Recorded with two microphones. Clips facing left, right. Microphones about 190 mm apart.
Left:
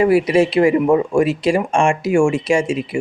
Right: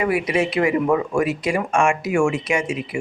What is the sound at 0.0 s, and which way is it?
Speech, 30° left (ahead or behind).